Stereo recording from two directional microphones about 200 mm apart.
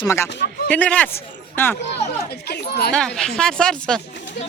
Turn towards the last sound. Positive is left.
turn(degrees=5)  # may be behind; listen again after turning